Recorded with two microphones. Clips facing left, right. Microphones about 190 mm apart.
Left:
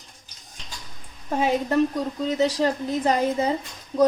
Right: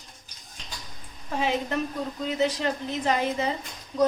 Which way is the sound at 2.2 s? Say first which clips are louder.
Left 4 dB; 35° left (ahead or behind).